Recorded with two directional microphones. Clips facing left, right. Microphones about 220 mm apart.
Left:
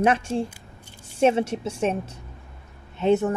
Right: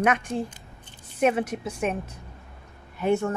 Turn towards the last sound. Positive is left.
turn(degrees=20)  # may be behind; listen again after turning